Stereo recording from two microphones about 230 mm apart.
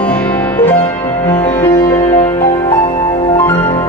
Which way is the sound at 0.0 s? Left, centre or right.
Centre.